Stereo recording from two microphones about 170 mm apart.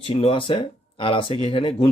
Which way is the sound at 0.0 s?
35° left (ahead or behind).